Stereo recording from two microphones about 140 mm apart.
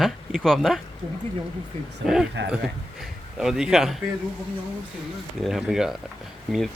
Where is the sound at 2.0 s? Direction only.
5° right (ahead or behind).